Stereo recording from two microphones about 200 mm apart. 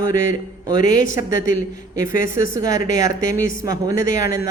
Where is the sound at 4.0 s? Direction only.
40° left (ahead or behind).